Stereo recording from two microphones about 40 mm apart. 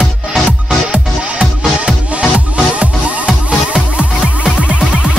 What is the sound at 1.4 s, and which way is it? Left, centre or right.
Music, right.